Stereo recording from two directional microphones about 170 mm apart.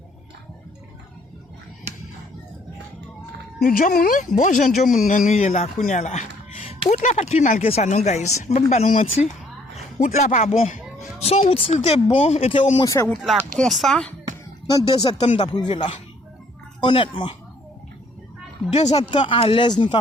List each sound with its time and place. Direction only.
3.7 s a man's voice: 55° left (ahead or behind); by 12.8 s 35° left (ahead or behind)
12.8 s speech: 20° left (ahead or behind)
13.6 s speech: centre (ahead or behind)
14.8 s speech: 30° left (ahead or behind)
15.5 s speech: 25° left (ahead or behind)
18.9 s speech: 30° left (ahead or behind)